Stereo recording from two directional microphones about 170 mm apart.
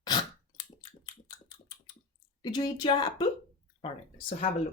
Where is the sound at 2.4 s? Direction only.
25° left (ahead or behind).